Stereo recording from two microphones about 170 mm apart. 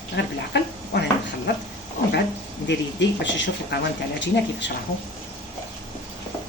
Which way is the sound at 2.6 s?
90° left.